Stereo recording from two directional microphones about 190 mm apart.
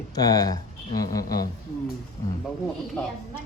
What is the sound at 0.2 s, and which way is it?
Speech, 20° left (ahead or behind).